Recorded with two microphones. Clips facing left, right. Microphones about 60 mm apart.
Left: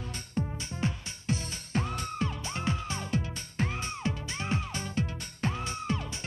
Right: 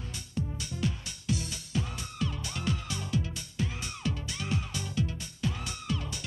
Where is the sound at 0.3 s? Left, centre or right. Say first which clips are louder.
Left 1 dB; left.